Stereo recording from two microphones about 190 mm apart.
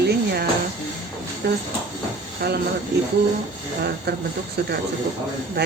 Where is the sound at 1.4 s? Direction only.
60° right (ahead or behind).